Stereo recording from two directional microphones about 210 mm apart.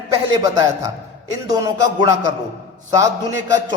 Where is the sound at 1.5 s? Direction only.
15° right (ahead or behind).